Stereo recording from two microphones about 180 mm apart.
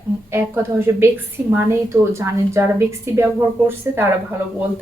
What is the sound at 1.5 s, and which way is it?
A woman's voice, 15° right (ahead or behind).